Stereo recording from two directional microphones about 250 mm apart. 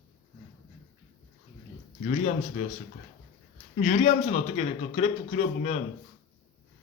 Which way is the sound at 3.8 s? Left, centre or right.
Left.